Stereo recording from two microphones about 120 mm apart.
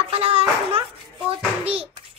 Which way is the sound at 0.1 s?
55° right (ahead or behind).